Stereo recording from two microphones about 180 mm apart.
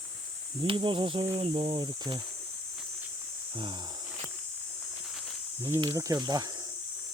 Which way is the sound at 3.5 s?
25° right (ahead or behind).